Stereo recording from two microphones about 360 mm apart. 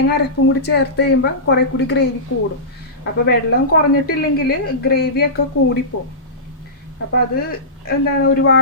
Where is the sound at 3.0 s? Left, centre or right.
Left.